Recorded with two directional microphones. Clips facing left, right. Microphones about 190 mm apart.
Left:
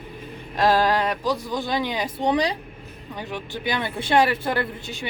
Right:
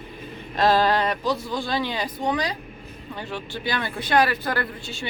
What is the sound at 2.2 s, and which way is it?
Speech, 30° left (ahead or behind).